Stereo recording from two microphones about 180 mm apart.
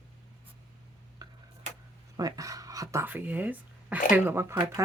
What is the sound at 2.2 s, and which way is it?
Speech, 20° right (ahead or behind).